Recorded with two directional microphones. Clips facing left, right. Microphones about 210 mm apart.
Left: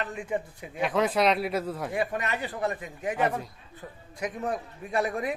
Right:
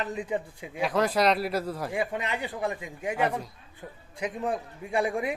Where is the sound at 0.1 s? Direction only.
20° right (ahead or behind).